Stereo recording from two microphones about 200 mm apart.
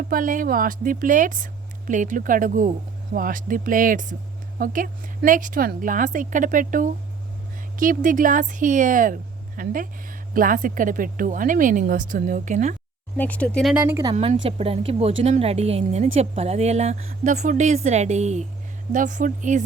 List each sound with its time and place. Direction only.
0.1 s a woman's voice: 45° right (ahead or behind)
13.1 s speech: 5° left (ahead or behind)
13.8 s speech: 15° right (ahead or behind)
14.1 s a woman's voice: 30° right (ahead or behind)